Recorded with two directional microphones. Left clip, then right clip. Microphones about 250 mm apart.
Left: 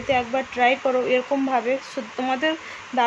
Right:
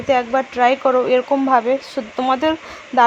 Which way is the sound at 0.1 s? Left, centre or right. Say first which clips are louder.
Right 6 dB; centre.